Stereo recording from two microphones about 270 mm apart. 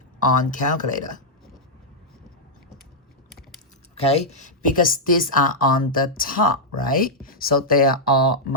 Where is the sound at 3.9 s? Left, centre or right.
Left.